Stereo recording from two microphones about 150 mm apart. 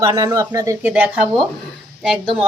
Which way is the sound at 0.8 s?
10° right (ahead or behind).